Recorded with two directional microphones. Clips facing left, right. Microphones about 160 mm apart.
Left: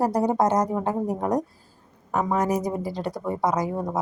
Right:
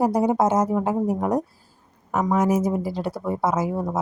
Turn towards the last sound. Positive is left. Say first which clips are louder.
# right 1 dB
turn(degrees=-5)  # may be behind; listen again after turning